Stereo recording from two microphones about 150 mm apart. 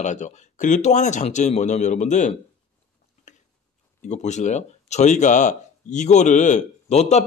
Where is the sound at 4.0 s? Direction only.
50° left (ahead or behind).